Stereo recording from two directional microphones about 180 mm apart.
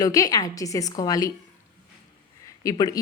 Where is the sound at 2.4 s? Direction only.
20° left (ahead or behind).